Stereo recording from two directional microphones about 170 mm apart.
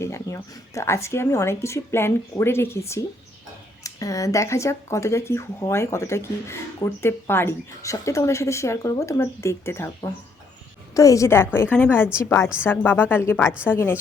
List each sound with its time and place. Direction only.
0.0 s speech: 15° left (ahead or behind)